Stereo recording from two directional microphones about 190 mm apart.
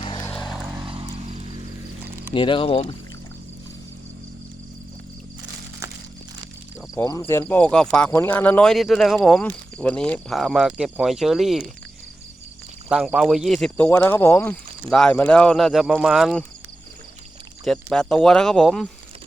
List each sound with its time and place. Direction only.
0.0 s vehicle: 25° left (ahead or behind)
0.9 s a sound: 30° right (ahead or behind)
2.3 s speech: 25° left (ahead or behind)
6.9 s speech: 20° left (ahead or behind); by 11.7 s centre (ahead or behind)
12.9 s speech: 5° right (ahead or behind)
17.7 s speech: 5° left (ahead or behind)